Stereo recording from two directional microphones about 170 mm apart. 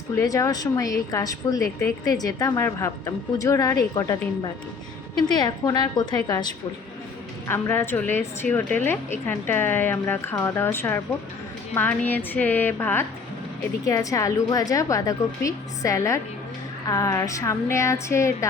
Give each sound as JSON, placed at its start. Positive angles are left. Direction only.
{"t": 0.2, "sound": "a woman's voice", "side_deg": 20}